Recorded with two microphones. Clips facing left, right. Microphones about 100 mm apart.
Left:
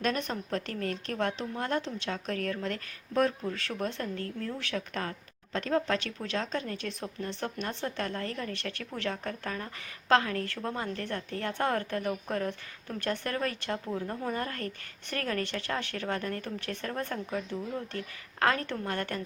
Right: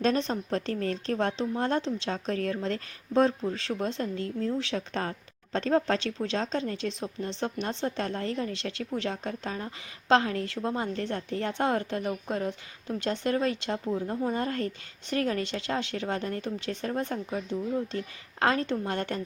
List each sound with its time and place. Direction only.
0.0 s a woman's voice: 25° right (ahead or behind)
13.7 s speech: 5° right (ahead or behind)
14.3 s a woman's voice: 25° right (ahead or behind)